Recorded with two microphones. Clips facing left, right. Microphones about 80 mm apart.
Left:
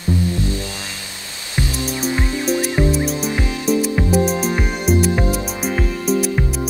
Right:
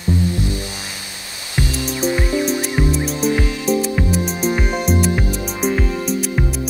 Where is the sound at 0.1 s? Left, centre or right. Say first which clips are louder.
Even; right.